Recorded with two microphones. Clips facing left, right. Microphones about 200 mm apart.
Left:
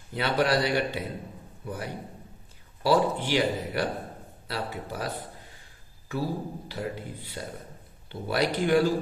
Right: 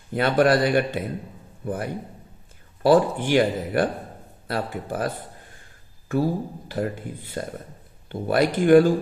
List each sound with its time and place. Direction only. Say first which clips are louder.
0.1 s a man's voice: right 6 dB; 50° right (ahead or behind)